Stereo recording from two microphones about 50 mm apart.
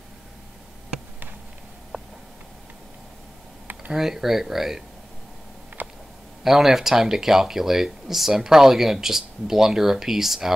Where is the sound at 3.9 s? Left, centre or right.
Centre.